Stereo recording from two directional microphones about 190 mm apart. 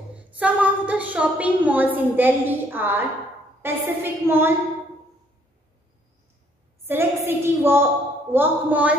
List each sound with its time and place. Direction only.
0.3 s a woman's voice: 5° right (ahead or behind)
6.9 s a woman's voice: 10° right (ahead or behind)